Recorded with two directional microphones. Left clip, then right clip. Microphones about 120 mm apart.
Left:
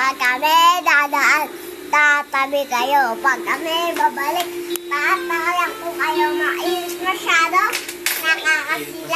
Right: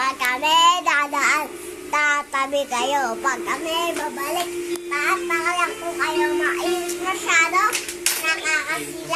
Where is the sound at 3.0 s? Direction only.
15° left (ahead or behind).